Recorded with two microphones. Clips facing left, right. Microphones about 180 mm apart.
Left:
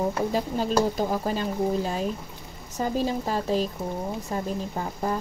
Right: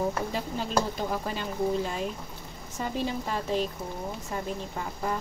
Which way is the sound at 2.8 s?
40° left (ahead or behind).